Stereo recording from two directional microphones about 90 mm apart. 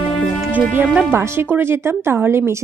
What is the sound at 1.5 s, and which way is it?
Speech, 25° right (ahead or behind).